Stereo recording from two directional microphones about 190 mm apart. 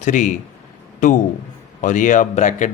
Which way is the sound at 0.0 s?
40° left (ahead or behind).